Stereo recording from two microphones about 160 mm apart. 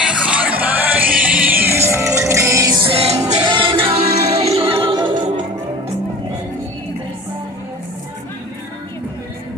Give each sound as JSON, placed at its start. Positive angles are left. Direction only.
{"t": 0.0, "sound": "music", "side_deg": -5}
{"t": 2.9, "sound": "music", "side_deg": -40}